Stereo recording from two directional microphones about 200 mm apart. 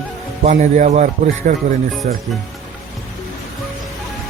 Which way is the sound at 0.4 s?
35° right (ahead or behind).